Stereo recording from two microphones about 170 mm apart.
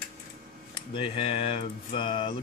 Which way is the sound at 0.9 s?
30° left (ahead or behind).